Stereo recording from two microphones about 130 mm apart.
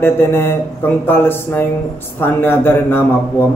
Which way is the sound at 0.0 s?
20° left (ahead or behind).